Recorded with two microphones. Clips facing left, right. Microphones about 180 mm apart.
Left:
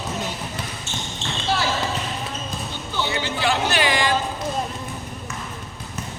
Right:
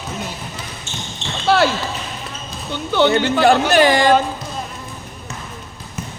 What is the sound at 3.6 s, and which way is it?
Speech, 45° right (ahead or behind).